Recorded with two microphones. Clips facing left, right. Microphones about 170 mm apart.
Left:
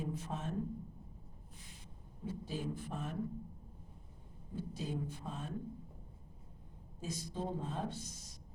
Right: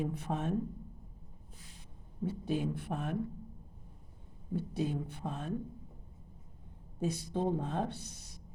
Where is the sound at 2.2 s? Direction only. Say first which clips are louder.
Right 7 dB; 65° right (ahead or behind).